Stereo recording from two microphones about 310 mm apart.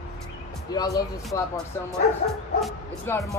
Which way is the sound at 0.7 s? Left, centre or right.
Centre.